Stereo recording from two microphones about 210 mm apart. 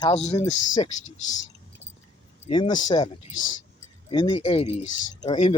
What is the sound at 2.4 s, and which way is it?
Speech, 20° left (ahead or behind).